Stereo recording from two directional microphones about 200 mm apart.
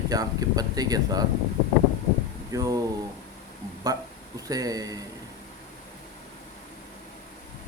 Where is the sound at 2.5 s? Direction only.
15° right (ahead or behind).